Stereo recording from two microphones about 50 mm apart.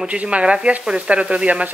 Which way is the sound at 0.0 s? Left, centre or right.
Right.